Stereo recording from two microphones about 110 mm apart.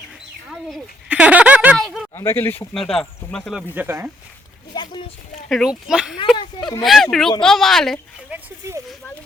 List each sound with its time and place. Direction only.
1.0 s a sound: 10° right (ahead or behind)
2.1 s speech: 20° left (ahead or behind)
2.7 s speech: 5° left (ahead or behind)
3.8 s speech: 20° right (ahead or behind)
4.7 s speech: 40° left (ahead or behind)
5.5 s speech: centre (ahead or behind)
8.3 s speech: 10° right (ahead or behind)